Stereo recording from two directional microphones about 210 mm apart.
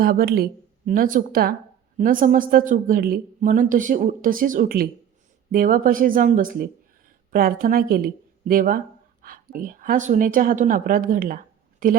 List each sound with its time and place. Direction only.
0.0 s a woman's voice: 45° right (ahead or behind)